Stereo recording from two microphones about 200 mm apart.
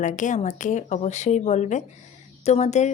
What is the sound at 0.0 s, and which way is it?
Speech, 40° left (ahead or behind).